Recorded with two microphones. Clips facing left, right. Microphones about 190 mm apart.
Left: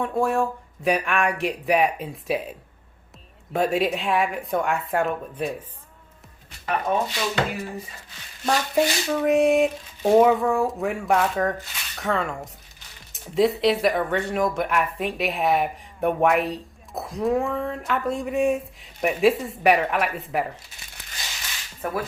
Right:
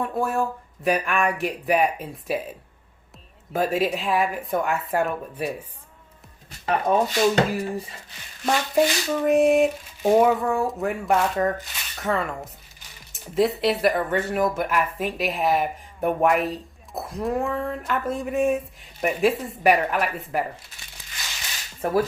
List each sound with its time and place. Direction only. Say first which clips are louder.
0.0 s speech: left 2 dB; centre (ahead or behind)
6.7 s speech: right 3 dB; 40° right (ahead or behind)
8.7 s speech: right 2 dB; centre (ahead or behind)
21.0 s crushing: left 4 dB; 65° left (ahead or behind)
21.8 s speech: right 6 dB; 30° right (ahead or behind)